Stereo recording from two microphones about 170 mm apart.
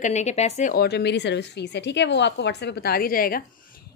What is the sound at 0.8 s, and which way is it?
A woman's voice, 80° left.